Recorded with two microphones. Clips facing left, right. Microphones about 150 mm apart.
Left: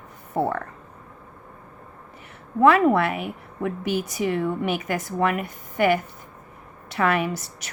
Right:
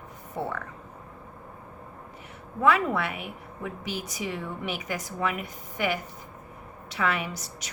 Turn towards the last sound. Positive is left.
turn(degrees=55)  # may be behind; listen again after turning